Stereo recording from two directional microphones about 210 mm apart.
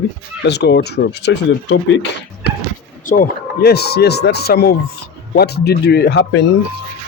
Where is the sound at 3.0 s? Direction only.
40° left (ahead or behind).